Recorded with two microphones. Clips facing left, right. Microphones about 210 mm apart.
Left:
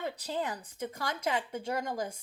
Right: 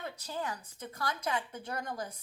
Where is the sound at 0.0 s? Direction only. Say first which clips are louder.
Left 4 dB; 20° left (ahead or behind).